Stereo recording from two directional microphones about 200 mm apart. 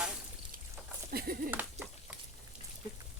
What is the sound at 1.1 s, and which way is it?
Speech, 45° right (ahead or behind).